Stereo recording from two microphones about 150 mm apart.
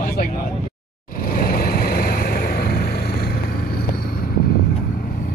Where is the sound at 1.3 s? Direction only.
75° left (ahead or behind); by 3.3 s 90° left.